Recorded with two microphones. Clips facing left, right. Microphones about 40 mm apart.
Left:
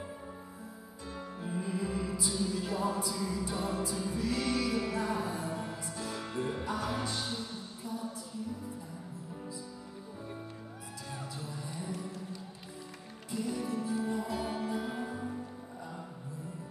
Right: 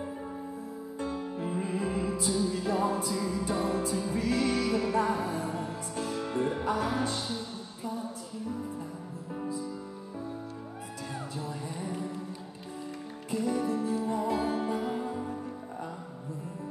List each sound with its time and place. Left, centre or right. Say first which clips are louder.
1.5 s music: right 2 dB; right
6.3 s music: right 6 dB; right
11.9 s music: right 4 dB; right
13.3 s music: right 5 dB; right